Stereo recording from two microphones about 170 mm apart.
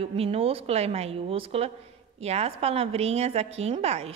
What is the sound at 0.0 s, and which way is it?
A woman's voice, 35° right (ahead or behind).